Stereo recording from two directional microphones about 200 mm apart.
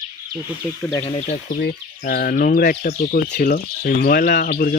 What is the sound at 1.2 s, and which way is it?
Speech, 40° left (ahead or behind).